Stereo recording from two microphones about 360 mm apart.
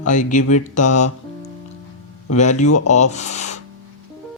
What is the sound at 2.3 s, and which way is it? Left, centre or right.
Speech, centre.